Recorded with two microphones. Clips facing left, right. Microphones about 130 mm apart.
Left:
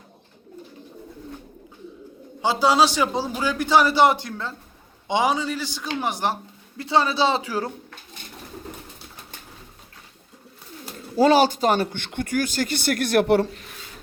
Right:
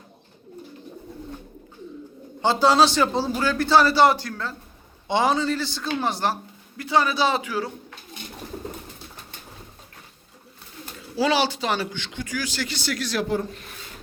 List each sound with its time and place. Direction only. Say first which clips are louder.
2.4 s a man's voice: right 1 dB; 10° left (ahead or behind); by 7.5 s 25° left (ahead or behind)
11.2 s speech: left 5 dB; 45° left (ahead or behind); by 13.5 s 75° left (ahead or behind)